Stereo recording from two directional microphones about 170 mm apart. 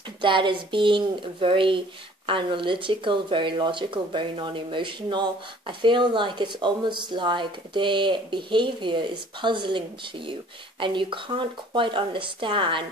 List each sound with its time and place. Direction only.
0.2 s speech: 30° right (ahead or behind)